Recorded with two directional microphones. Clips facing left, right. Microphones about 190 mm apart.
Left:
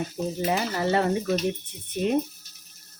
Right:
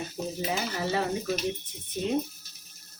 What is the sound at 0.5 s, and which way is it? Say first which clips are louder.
Speech: left 5 dB; 60° left (ahead or behind).